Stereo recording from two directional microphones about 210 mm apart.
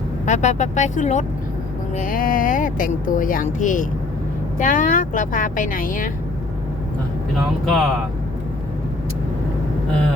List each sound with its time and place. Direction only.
0.3 s speech: 35° left (ahead or behind)
7.6 s speech: centre (ahead or behind)